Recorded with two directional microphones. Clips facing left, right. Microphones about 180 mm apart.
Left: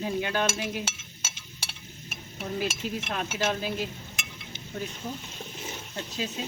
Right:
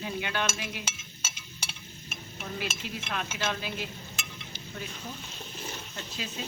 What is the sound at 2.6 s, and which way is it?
Stir, 40° left (ahead or behind).